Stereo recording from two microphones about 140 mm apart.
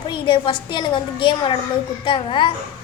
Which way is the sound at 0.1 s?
35° left (ahead or behind).